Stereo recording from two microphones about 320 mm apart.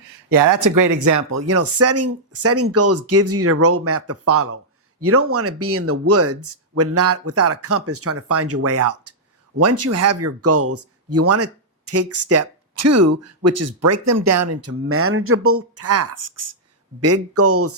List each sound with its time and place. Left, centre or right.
0.3 s speech: right